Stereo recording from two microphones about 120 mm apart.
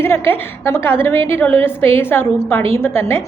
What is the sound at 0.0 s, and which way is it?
A woman's voice, 20° left (ahead or behind).